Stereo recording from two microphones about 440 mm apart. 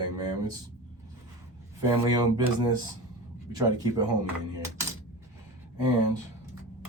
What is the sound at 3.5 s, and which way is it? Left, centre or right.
Speech, centre.